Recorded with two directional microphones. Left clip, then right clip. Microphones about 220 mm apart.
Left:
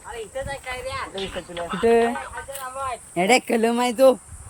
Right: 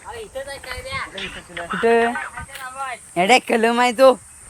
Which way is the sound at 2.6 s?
45° left (ahead or behind).